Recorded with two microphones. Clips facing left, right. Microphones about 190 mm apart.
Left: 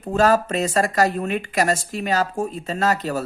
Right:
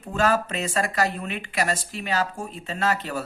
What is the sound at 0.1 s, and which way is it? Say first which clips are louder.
Speech: left 5 dB; 40° left (ahead or behind).